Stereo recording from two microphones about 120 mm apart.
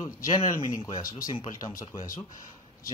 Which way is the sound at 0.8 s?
35° left (ahead or behind).